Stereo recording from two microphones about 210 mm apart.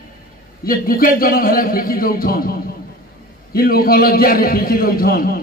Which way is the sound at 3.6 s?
45° left (ahead or behind).